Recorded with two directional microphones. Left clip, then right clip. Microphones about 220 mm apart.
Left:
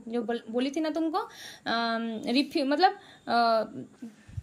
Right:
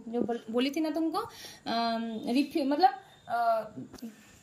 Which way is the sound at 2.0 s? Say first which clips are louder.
Left 2 dB; 50° left (ahead or behind).